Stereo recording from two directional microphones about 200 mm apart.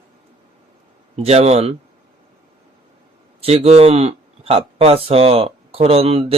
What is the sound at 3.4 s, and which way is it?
Speech, 30° right (ahead or behind).